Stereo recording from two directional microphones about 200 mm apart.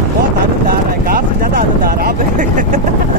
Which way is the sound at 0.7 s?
45° right (ahead or behind).